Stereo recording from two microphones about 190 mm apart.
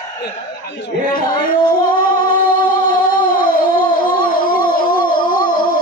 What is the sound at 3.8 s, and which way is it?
Howl, 25° left (ahead or behind).